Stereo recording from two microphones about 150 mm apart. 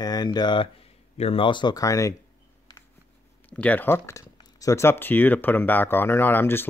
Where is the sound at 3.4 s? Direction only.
10° left (ahead or behind).